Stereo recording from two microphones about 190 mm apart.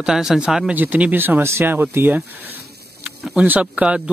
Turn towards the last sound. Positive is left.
turn(degrees=-5)  # may be behind; listen again after turning